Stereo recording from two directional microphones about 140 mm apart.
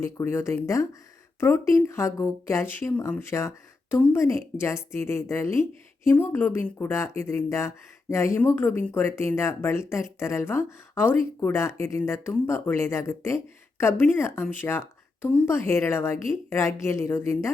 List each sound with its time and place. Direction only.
0.0 s speech: 20° left (ahead or behind)